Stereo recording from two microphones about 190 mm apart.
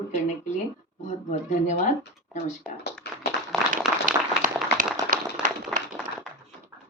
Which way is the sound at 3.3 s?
60° left (ahead or behind).